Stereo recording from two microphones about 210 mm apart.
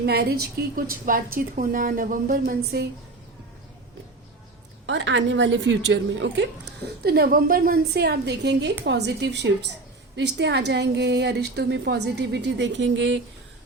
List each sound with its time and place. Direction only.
0.0 s a woman's voice: 50° right (ahead or behind)
4.9 s a woman's voice: 60° right (ahead or behind)